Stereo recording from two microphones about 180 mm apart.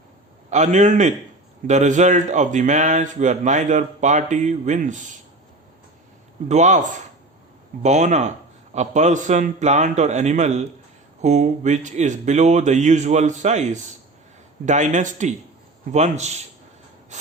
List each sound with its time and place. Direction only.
0.5 s a man's voice: 40° right (ahead or behind)
6.5 s a man's voice: 40° right (ahead or behind)